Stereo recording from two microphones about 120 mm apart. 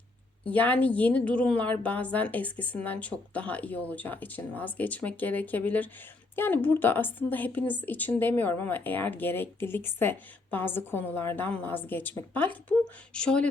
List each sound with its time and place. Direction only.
0.4 s a woman's voice: 10° left (ahead or behind)